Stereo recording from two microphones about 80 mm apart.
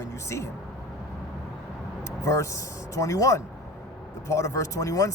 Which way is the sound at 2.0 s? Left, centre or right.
Left.